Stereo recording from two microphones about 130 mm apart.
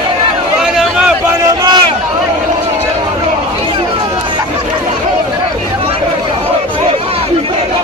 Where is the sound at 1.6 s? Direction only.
35° right (ahead or behind).